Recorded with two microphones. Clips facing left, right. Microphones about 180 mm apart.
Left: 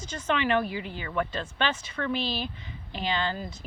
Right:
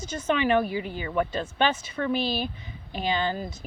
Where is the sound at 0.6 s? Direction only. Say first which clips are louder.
Right 4 dB; 50° right (ahead or behind).